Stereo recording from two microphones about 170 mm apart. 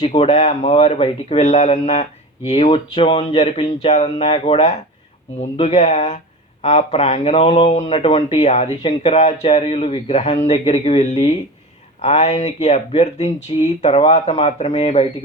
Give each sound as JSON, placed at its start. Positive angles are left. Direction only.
{"t": 0.1, "sound": "speech", "side_deg": 35}